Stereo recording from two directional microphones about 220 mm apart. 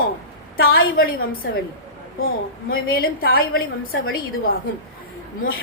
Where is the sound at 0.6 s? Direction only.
40° left (ahead or behind).